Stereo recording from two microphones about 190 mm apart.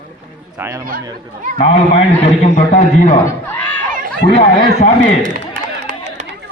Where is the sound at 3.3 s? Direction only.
10° left (ahead or behind).